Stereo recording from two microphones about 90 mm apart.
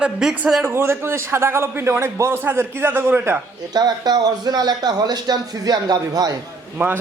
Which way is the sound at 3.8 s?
50° right (ahead or behind).